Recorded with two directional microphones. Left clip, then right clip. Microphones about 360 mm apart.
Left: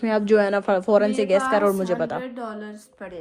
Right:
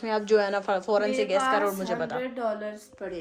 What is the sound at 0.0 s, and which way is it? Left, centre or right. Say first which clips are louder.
A woman's voice: left 5 dB; centre.